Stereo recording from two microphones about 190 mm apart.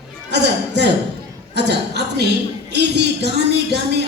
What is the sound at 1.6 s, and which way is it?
A woman's voice, 60° right (ahead or behind).